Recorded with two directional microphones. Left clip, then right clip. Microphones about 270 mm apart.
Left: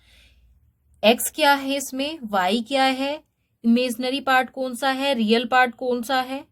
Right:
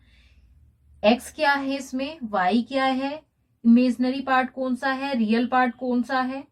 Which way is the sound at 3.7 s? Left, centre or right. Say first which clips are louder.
Right 1 dB; left.